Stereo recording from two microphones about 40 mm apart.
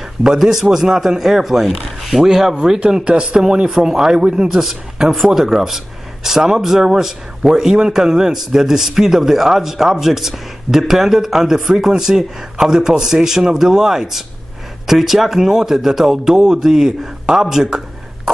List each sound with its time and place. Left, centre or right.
0.4 s speech: centre
2.8 s speech: right
3.7 s a man's voice: centre